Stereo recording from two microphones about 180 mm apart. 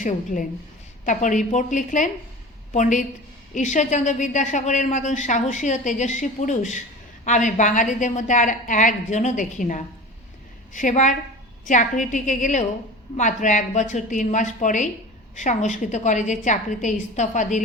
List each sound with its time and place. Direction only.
0.0 s a woman's voice: 45° left (ahead or behind)